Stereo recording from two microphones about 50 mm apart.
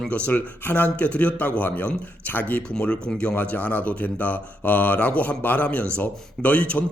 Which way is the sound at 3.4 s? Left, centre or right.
Left.